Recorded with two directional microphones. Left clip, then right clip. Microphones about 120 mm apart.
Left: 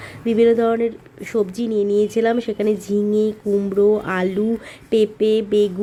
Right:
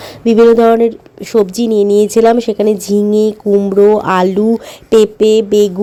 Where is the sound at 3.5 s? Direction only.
30° right (ahead or behind).